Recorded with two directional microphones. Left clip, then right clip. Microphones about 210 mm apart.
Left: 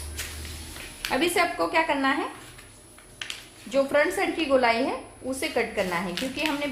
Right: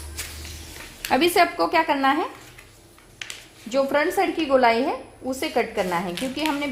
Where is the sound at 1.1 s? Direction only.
40° right (ahead or behind).